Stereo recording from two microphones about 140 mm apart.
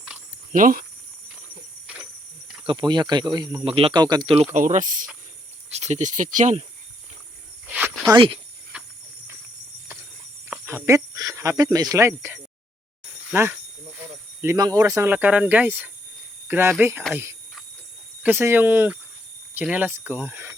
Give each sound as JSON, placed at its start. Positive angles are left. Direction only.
{"t": 0.5, "sound": "speech", "side_deg": -80}
{"t": 2.6, "sound": "speech", "side_deg": -35}
{"t": 4.5, "sound": "speech", "side_deg": -65}
{"t": 5.7, "sound": "speech", "side_deg": -55}
{"t": 7.7, "sound": "cricket", "side_deg": -10}
{"t": 8.1, "sound": "speech", "side_deg": -40}
{"t": 8.7, "sound": "horse", "side_deg": -10}
{"t": 10.7, "sound": "speech", "side_deg": -20}
{"t": 15.1, "sound": "speech", "side_deg": -10}
{"t": 18.2, "sound": "speech", "side_deg": -15}